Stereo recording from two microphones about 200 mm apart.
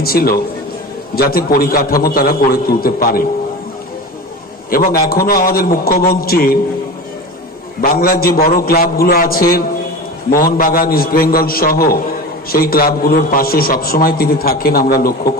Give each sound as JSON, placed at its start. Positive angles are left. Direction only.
{"t": 0.0, "sound": "a man's voice", "side_deg": 50}
{"t": 4.7, "sound": "a man's voice", "side_deg": 45}
{"t": 7.8, "sound": "a man's voice", "side_deg": 45}